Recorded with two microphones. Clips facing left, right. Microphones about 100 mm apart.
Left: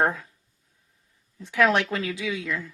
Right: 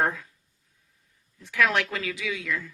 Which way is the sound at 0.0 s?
25° left (ahead or behind).